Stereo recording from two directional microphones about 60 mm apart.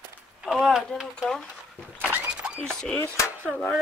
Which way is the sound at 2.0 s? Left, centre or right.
Right.